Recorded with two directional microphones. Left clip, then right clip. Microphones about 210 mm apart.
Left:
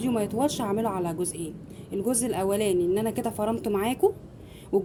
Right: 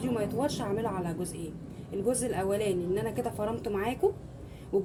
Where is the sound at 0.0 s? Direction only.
45° left (ahead or behind).